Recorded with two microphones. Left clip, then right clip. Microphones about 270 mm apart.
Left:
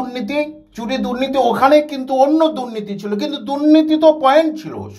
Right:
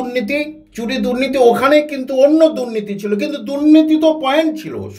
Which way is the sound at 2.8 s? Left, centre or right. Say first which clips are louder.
Right 3 dB; centre.